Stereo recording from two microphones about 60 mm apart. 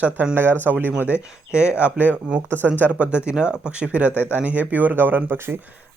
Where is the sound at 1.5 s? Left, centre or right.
Centre.